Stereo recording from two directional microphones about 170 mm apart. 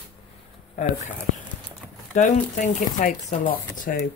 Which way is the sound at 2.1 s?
45° left (ahead or behind).